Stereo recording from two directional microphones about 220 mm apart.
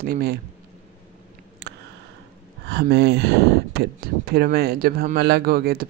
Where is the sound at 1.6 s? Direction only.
50° right (ahead or behind).